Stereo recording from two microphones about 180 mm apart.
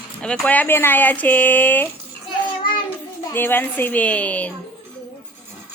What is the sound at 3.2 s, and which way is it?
Speech, 10° left (ahead or behind).